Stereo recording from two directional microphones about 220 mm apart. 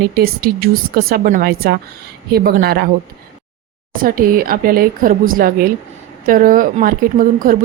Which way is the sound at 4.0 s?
40° right (ahead or behind).